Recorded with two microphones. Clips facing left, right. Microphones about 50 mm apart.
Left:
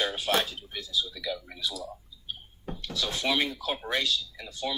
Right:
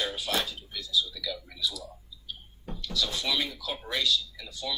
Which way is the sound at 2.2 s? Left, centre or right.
Left.